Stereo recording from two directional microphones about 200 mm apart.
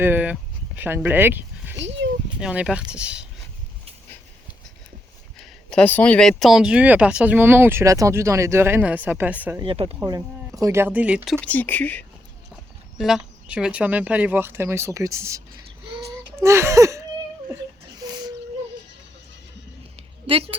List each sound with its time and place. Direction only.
0.0 s speech: 10° right (ahead or behind)
1.7 s a sound: 65° right (ahead or behind)
2.4 s speech: 5° right (ahead or behind)
5.4 s speech: 5° left (ahead or behind)
9.6 s speech: 25° right (ahead or behind); by 11.3 s 5° right (ahead or behind)
11.3 s speech: 10° left (ahead or behind); by 17.0 s 15° right (ahead or behind)
20.0 s a sound: 25° right (ahead or behind)